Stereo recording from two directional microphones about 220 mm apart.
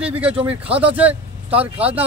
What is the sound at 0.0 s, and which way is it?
Speech, 5° right (ahead or behind).